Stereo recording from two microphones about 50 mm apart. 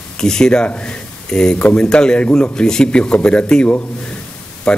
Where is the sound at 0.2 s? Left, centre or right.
Centre.